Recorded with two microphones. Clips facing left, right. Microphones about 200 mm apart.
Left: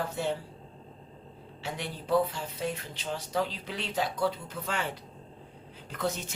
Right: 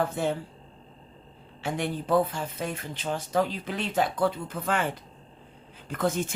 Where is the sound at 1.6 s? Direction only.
50° right (ahead or behind).